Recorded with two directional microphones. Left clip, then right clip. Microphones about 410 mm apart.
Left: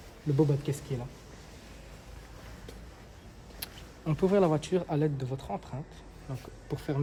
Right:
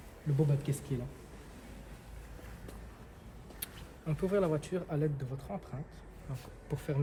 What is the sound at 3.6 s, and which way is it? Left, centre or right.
Speech, centre.